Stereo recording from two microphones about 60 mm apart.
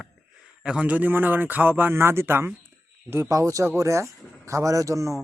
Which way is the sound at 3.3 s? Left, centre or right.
Right.